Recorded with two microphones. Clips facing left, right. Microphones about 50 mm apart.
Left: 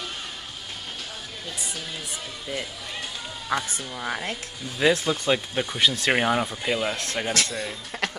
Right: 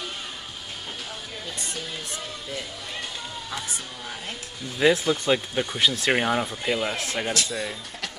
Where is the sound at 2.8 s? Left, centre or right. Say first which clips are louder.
Even; centre.